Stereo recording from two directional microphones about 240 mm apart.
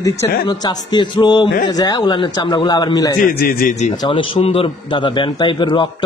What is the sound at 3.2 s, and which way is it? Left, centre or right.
Speech, left.